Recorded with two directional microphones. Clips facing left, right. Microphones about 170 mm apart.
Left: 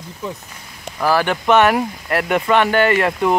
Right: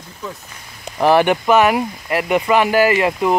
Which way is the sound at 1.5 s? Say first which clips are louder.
Even; 5° right (ahead or behind).